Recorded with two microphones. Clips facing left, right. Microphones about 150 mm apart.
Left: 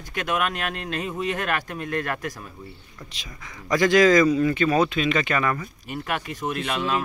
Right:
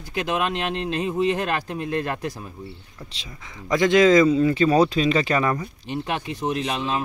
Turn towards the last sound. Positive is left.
turn(degrees=-25)  # may be behind; listen again after turning